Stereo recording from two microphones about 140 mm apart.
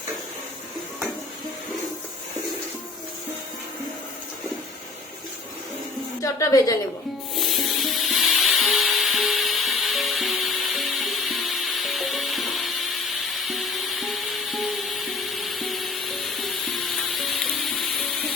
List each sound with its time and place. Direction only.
6.2 s a woman's voice: 25° left (ahead or behind)
7.3 s music: centre (ahead or behind)